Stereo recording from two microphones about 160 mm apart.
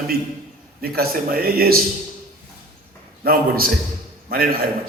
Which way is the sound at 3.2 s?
65° right (ahead or behind).